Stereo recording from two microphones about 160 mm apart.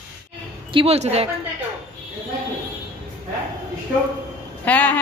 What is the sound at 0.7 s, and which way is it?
Speech, 40° right (ahead or behind).